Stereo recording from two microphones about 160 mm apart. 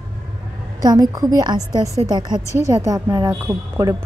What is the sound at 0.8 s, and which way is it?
A woman's voice, 25° right (ahead or behind).